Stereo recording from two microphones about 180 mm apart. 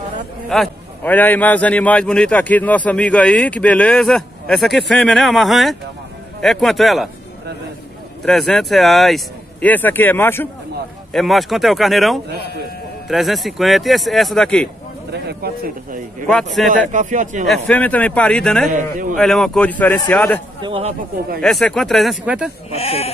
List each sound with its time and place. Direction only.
0.5 s a man's voice: 5° left (ahead or behind)
8.3 s speech: centre (ahead or behind)
11.1 s speech: centre (ahead or behind)
15.2 s a man's voice: 55° right (ahead or behind)
17.5 s speech: 5° left (ahead or behind)
18.7 s a man's voice: 45° right (ahead or behind)
19.1 s speech: centre (ahead or behind)
20.6 s speech: 30° right (ahead or behind)
21.4 s speech: 5° left (ahead or behind)
22.7 s speech: 35° left (ahead or behind)